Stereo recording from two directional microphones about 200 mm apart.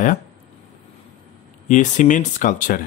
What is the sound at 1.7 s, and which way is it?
Speech, 40° left (ahead or behind).